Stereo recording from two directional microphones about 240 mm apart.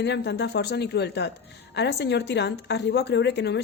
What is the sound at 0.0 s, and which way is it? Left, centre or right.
A woman's voice, left.